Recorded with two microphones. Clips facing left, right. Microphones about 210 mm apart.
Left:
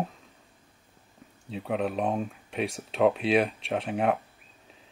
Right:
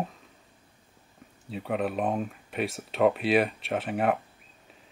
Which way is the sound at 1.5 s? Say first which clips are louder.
Even; centre (ahead or behind).